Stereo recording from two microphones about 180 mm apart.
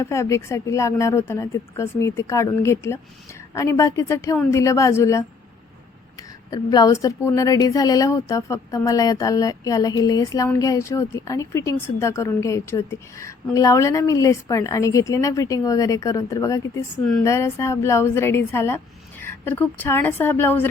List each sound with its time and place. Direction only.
0.0 s a woman's voice: 15° left (ahead or behind)